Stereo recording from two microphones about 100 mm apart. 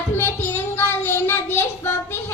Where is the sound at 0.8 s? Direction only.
25° left (ahead or behind).